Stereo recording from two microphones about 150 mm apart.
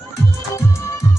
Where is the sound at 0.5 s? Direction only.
20° left (ahead or behind).